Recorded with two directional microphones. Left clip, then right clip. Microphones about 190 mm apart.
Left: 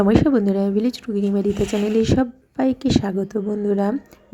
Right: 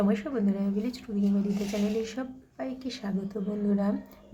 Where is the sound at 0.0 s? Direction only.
40° left (ahead or behind).